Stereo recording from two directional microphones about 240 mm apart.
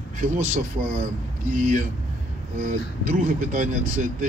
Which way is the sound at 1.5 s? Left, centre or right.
Right.